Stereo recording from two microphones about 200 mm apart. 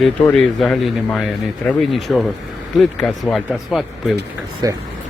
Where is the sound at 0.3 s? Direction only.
5° left (ahead or behind).